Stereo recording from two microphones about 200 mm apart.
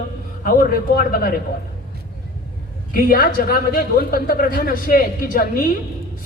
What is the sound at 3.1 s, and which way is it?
A woman's voice, 45° left (ahead or behind).